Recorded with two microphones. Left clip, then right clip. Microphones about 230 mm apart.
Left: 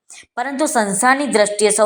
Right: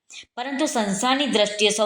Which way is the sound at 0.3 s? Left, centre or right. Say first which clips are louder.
Left 6 dB; left.